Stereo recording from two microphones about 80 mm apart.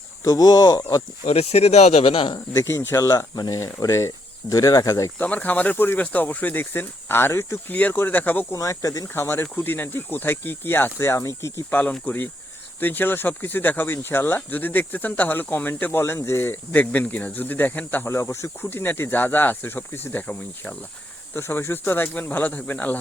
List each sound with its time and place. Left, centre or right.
0.3 s speech: left
2.5 s speech: left
5.1 s speech: centre
7.7 s speech: left
8.5 s speech: left
11.7 s speech: left
15.9 s speech: left
18.1 s speech: left
21.3 s speech: left